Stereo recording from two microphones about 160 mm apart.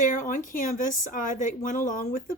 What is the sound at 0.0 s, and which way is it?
Speech, 55° left (ahead or behind).